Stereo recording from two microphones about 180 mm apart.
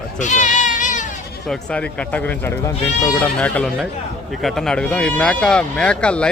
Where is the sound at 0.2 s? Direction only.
45° left (ahead or behind).